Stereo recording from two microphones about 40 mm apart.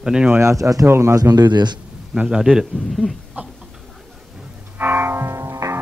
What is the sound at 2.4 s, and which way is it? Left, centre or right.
Speech, centre.